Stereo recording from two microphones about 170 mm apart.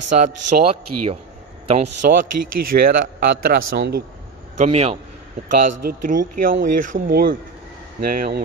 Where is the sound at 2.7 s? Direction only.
60° right (ahead or behind).